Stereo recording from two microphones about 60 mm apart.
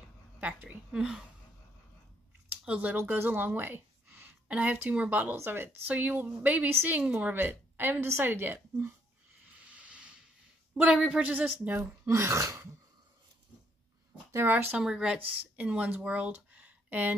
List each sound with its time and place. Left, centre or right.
0.4 s a woman's voice: right
2.6 s speech: centre
3.0 s a woman's voice: right
4.5 s a woman's voice: right
5.3 s a woman's voice: right
9.7 s a sound: centre
10.7 s a woman's voice: centre
12.1 s throat clearing: right
14.3 s a woman's voice: right
14.8 s speech: centre
15.1 s speech: right